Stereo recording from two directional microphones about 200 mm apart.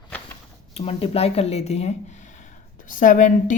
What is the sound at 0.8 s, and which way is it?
Speech, 30° left (ahead or behind).